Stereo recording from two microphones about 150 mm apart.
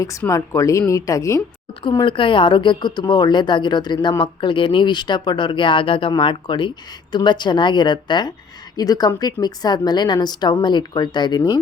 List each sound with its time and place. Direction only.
0.2 s a woman's voice: 20° left (ahead or behind)
1.8 s a woman's voice: 30° left (ahead or behind)